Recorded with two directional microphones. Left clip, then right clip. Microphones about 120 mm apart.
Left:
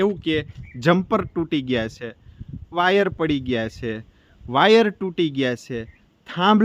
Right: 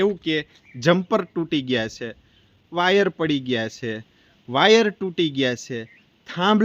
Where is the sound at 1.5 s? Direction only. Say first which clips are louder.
Right 1 dB; 40° left (ahead or behind).